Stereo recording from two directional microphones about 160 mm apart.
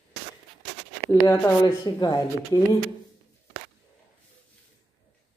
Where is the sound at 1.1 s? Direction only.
20° left (ahead or behind).